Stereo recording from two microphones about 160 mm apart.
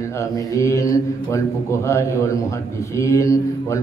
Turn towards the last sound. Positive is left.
turn(degrees=20)  # may be behind; listen again after turning